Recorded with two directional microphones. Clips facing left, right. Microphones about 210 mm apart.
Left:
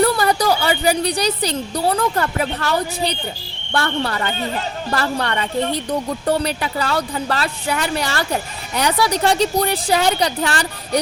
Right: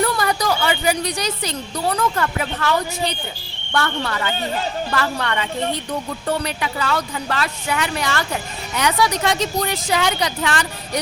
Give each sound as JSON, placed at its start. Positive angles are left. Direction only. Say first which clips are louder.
{"t": 0.0, "sound": "speech", "louder": "left 4 dB", "side_deg": 35}